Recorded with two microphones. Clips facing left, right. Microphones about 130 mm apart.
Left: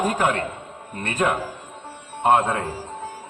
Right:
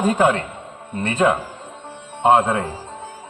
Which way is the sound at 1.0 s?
25° right (ahead or behind).